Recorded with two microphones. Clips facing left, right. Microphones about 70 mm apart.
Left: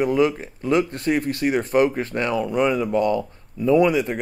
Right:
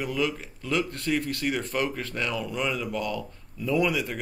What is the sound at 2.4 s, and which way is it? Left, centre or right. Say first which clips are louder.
Speech: left 9 dB; left.